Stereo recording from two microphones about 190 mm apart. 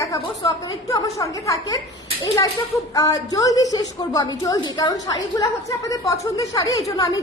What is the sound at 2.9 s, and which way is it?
A woman's voice, 20° left (ahead or behind).